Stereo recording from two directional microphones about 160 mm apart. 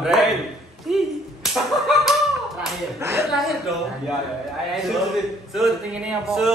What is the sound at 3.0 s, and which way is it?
Speech, 15° right (ahead or behind).